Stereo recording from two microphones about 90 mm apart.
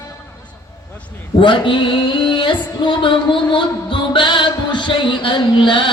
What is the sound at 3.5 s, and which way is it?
Music, 65° left (ahead or behind).